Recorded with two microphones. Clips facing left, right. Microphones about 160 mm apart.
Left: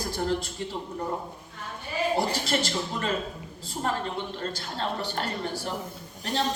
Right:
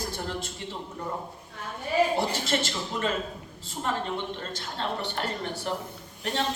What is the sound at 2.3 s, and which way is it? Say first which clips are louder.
Speech: left 1 dB; 35° left (ahead or behind).